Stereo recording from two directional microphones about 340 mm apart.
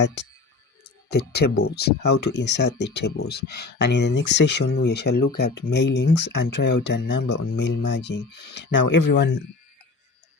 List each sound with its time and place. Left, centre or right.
1.1 s speech: left